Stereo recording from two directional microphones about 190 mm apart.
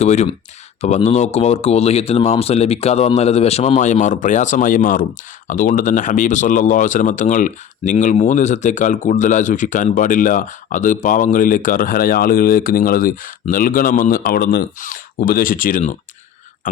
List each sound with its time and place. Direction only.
0.0 s speech: 35° left (ahead or behind)